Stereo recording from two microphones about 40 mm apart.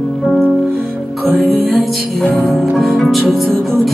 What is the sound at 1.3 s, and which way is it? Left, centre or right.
Music, centre.